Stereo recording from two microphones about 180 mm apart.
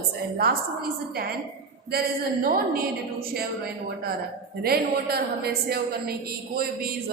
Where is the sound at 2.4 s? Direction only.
55° right (ahead or behind).